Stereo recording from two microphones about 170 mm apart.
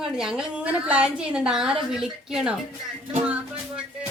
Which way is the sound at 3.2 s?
5° right (ahead or behind).